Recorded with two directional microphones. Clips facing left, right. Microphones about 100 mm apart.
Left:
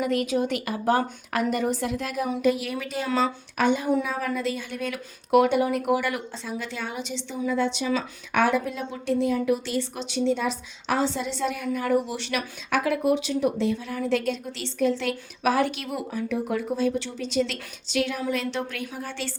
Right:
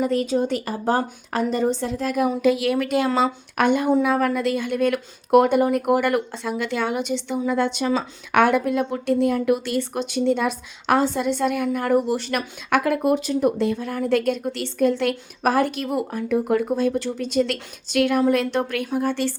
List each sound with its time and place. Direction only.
0.0 s a woman's voice: 35° right (ahead or behind)
2.4 s speech: 90° right; by 19.3 s 50° right (ahead or behind)